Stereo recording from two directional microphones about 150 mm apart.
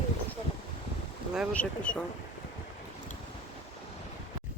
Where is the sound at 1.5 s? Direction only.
10° left (ahead or behind).